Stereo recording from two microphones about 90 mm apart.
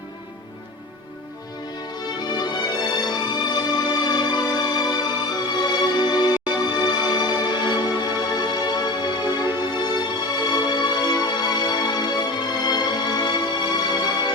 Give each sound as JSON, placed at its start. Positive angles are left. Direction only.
{"t": 2.2, "sound": "music", "side_deg": 50}